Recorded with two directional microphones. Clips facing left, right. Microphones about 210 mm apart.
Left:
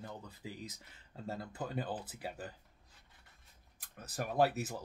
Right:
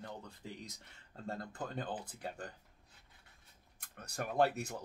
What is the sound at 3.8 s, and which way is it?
Speech, centre (ahead or behind).